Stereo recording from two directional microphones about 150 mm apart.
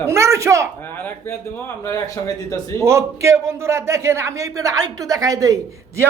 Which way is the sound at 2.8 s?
20° right (ahead or behind).